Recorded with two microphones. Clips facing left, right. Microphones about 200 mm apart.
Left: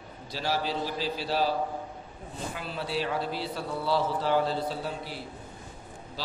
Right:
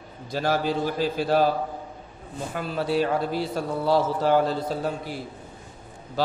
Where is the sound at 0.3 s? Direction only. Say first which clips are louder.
Right 6 dB; 50° right (ahead or behind).